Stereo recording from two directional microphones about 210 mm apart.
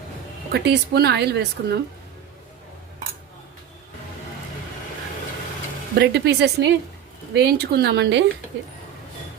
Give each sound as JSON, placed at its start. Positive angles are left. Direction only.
{"t": 0.5, "sound": "speech", "side_deg": -50}
{"t": 6.0, "sound": "speech", "side_deg": -50}